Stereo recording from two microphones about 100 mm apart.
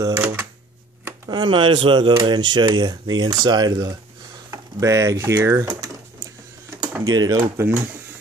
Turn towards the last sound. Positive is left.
turn(degrees=-25)  # may be behind; listen again after turning